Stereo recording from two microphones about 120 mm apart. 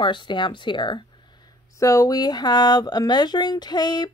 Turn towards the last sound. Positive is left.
turn(degrees=35)  # may be behind; listen again after turning